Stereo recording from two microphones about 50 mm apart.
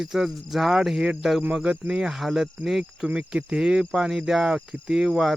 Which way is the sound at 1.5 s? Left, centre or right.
Right.